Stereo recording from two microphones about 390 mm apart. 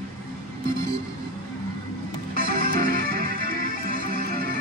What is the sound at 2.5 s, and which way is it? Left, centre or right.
Music, right.